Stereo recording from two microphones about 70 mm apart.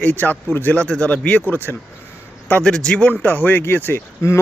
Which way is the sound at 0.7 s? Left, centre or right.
Centre.